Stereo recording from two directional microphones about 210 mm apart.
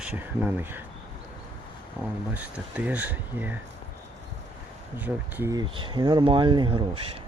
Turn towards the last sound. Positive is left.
turn(degrees=-25)  # may be behind; listen again after turning